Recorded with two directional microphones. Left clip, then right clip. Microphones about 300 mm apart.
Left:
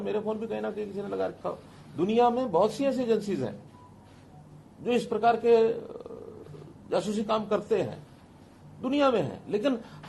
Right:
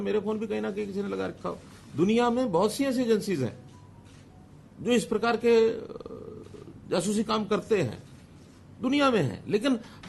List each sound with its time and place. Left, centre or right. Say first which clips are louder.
0.0 s a man's voice: right 2 dB; right
4.8 s a man's voice: even; right